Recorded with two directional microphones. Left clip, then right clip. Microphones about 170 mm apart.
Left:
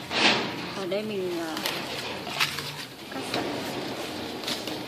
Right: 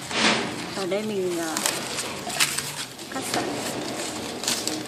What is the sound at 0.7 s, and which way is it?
Speech, 10° right (ahead or behind).